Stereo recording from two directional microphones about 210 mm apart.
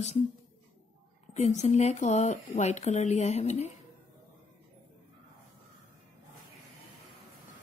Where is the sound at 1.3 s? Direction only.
30° left (ahead or behind).